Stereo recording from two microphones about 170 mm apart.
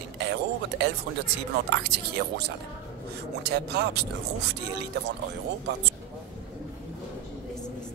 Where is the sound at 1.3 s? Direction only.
85° right.